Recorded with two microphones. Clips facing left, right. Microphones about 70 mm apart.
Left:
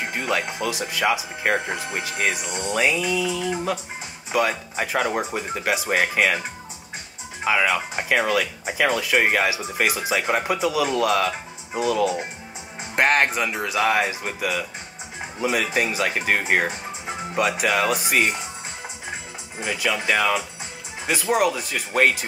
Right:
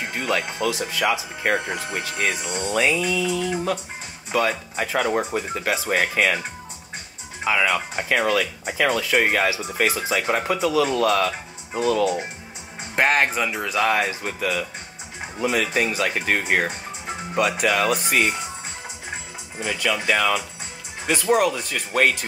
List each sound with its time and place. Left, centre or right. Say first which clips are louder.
0.0 s music: even; centre
0.7 s speech: even; left
1.5 s speech: even; centre
7.4 s speech: even; centre
12.0 s speech: even; centre
19.6 s speech: right 1 dB; centre